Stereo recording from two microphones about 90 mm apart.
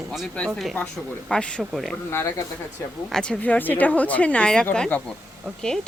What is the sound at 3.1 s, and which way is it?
Speech, 10° left (ahead or behind).